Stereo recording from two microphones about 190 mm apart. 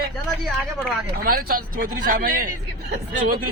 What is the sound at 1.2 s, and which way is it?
Speech, 50° right (ahead or behind).